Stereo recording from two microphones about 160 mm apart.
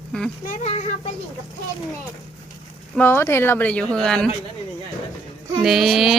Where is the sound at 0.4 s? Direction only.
45° left (ahead or behind).